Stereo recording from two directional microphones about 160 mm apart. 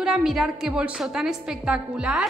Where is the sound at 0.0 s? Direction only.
5° right (ahead or behind).